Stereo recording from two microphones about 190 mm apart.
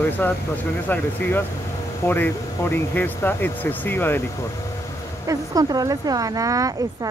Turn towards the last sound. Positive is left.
turn(degrees=-20)  # may be behind; listen again after turning